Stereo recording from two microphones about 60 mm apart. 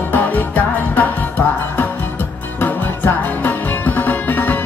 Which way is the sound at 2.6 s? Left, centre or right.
Left.